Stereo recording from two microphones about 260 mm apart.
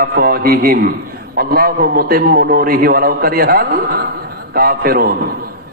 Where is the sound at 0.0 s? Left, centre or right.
Right.